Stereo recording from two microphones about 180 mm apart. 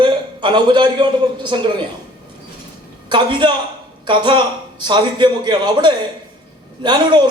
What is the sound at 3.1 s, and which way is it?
A man's voice, 25° right (ahead or behind).